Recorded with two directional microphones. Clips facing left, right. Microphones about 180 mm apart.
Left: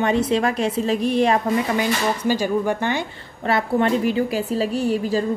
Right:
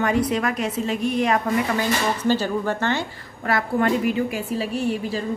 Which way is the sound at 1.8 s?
10° left (ahead or behind).